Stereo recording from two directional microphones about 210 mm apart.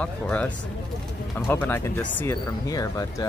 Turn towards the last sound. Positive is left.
turn(degrees=15)  # may be behind; listen again after turning